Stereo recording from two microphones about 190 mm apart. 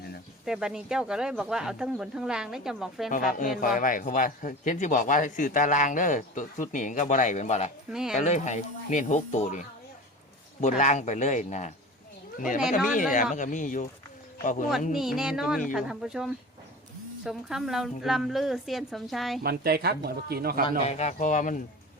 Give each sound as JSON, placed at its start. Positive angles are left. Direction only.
{"t": 0.4, "sound": "speech", "side_deg": -5}
{"t": 3.1, "sound": "speech", "side_deg": 45}
{"t": 7.9, "sound": "speech", "side_deg": -5}
{"t": 8.1, "sound": "speech", "side_deg": 40}
{"t": 14.9, "sound": "speech", "side_deg": 0}
{"t": 19.4, "sound": "speech", "side_deg": -55}
{"t": 20.7, "sound": "speech", "side_deg": 35}